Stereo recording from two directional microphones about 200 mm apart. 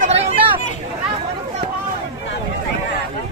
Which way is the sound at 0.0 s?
30° right (ahead or behind).